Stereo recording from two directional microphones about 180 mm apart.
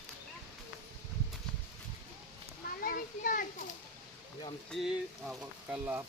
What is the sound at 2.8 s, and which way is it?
Children playing, 50° left (ahead or behind).